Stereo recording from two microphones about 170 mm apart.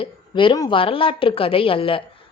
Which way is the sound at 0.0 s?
30° left (ahead or behind).